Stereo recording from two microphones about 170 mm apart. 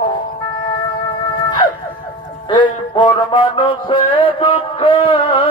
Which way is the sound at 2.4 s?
30° left (ahead or behind).